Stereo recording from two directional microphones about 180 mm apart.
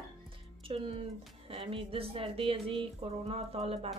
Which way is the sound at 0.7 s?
30° right (ahead or behind).